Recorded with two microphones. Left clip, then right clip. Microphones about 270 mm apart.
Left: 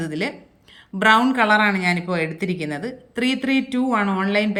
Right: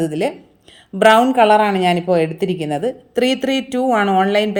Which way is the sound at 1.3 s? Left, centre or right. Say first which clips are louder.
Right 5 dB; right.